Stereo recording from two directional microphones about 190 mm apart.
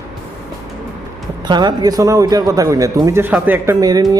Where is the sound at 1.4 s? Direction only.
25° right (ahead or behind).